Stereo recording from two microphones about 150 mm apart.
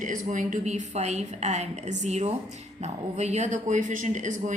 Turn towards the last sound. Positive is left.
turn(degrees=-55)  # may be behind; listen again after turning